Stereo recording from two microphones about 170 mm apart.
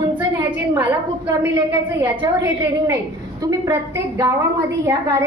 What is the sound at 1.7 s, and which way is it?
Speech, 15° right (ahead or behind).